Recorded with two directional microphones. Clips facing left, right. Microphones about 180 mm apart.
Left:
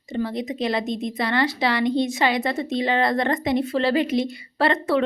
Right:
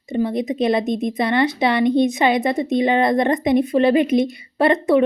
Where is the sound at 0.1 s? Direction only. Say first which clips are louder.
Right 5 dB; 20° right (ahead or behind).